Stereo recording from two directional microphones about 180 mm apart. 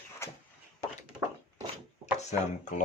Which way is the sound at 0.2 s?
15° left (ahead or behind).